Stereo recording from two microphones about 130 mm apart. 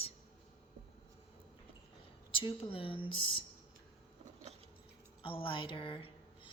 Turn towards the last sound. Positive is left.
turn(degrees=40)  # may be behind; listen again after turning